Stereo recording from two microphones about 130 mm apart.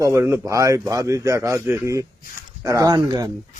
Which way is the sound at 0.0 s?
20° right (ahead or behind).